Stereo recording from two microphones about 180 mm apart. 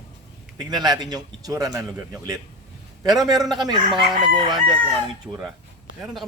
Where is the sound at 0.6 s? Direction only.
20° right (ahead or behind).